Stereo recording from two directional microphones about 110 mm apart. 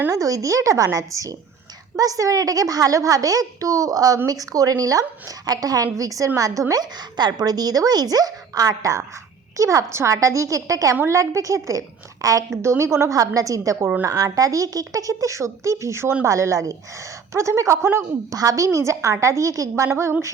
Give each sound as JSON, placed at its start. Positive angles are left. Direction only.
{"t": 0.1, "sound": "a woman's voice", "side_deg": -30}